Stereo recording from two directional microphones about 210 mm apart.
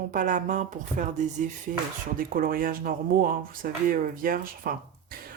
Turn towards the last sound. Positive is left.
turn(degrees=-45)  # may be behind; listen again after turning